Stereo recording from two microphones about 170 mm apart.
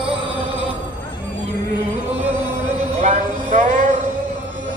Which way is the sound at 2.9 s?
45° right (ahead or behind).